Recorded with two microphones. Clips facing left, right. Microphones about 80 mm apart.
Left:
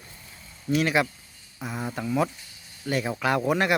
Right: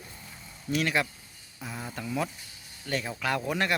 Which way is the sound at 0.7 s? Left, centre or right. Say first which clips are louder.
Left 5 dB; centre.